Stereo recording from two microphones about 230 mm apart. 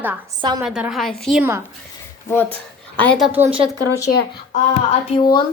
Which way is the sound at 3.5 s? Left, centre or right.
Centre.